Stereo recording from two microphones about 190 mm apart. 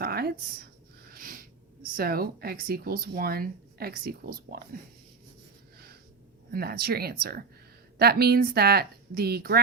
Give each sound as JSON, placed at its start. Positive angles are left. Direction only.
{"t": 0.0, "sound": "a sound", "side_deg": -55}
{"t": 1.1, "sound": "speech", "side_deg": -45}
{"t": 6.5, "sound": "speech", "side_deg": -55}